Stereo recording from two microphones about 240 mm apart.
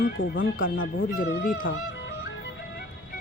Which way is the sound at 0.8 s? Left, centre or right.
Left.